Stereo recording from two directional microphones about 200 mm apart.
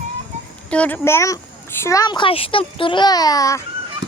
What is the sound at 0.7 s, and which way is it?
A child's voice, 5° left (ahead or behind).